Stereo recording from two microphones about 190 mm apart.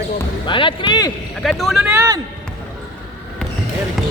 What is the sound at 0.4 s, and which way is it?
Speech, 25° left (ahead or behind).